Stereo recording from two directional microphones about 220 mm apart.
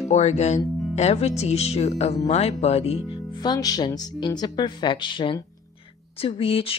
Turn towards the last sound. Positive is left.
turn(degrees=25)  # may be behind; listen again after turning